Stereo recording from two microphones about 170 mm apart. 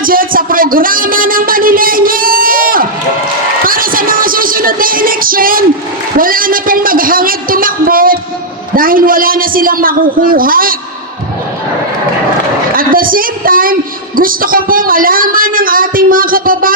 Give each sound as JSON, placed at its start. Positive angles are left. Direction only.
{"t": 0.0, "sound": "a sound", "side_deg": -55}
{"t": 3.6, "sound": "music", "side_deg": -55}
{"t": 6.1, "sound": "speech", "side_deg": -55}
{"t": 12.7, "sound": "a woman's voice", "side_deg": -55}